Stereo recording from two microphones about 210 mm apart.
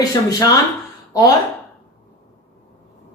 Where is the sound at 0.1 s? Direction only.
15° left (ahead or behind).